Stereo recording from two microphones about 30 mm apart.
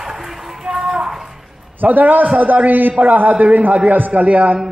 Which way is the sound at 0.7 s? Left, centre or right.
Centre.